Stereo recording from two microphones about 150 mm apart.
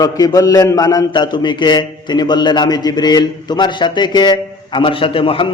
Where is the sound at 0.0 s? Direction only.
25° left (ahead or behind).